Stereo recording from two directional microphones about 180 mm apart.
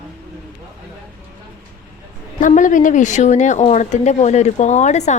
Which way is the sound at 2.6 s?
45° left (ahead or behind).